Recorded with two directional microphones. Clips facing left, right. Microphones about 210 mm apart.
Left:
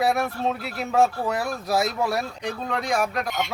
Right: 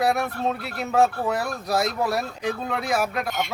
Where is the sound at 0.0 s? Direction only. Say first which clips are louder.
Even; centre (ahead or behind).